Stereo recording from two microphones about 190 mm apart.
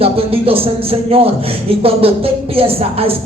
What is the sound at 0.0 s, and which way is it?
Speech, 30° right (ahead or behind).